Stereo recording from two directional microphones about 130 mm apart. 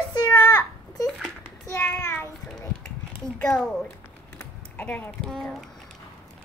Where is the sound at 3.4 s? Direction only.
5° left (ahead or behind).